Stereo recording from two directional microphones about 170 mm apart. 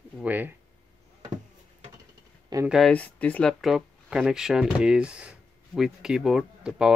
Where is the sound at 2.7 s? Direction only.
Centre (ahead or behind).